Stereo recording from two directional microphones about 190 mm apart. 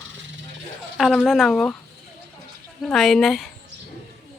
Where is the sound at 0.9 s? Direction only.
Centre (ahead or behind).